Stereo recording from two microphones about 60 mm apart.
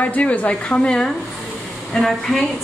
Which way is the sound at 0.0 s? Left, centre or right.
Left.